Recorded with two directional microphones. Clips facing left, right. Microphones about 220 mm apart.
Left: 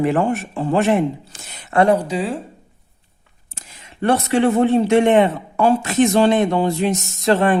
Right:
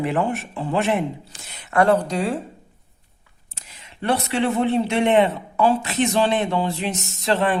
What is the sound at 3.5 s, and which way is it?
Speech, 50° left (ahead or behind).